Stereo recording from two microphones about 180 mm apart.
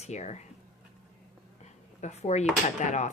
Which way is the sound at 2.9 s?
40° left (ahead or behind).